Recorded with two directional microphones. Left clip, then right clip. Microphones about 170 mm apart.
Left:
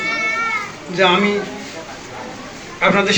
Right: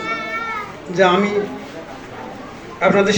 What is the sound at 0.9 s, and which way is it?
Speech, 25° right (ahead or behind).